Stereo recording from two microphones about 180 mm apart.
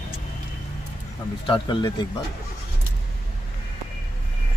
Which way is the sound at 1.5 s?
25° left (ahead or behind).